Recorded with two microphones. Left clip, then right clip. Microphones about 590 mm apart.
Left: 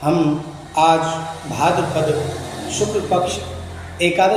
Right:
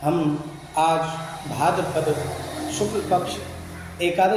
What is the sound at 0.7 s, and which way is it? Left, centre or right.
Speech, right.